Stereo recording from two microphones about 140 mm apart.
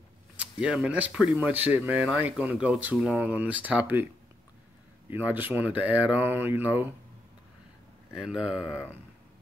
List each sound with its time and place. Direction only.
0.4 s speech: 5° right (ahead or behind)
5.1 s speech: 15° right (ahead or behind)
8.1 s speech: 5° right (ahead or behind)
8.6 s speech: 15° left (ahead or behind)